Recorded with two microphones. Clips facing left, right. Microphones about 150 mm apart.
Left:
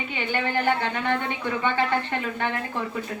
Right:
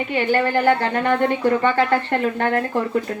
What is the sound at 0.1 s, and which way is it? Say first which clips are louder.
Speech: right 8 dB; 50° right (ahead or behind).